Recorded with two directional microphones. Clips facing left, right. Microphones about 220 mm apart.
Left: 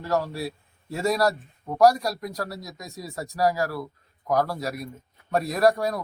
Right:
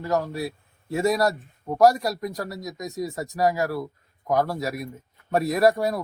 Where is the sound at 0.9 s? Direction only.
20° right (ahead or behind).